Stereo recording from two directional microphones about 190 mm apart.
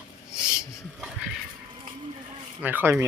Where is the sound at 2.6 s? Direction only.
10° right (ahead or behind).